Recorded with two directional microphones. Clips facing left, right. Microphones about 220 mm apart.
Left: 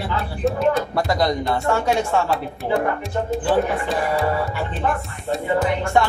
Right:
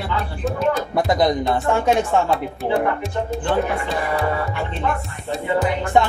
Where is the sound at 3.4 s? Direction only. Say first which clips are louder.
Left 1 dB; centre (ahead or behind).